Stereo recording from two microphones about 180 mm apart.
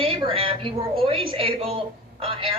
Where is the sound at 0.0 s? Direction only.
30° right (ahead or behind).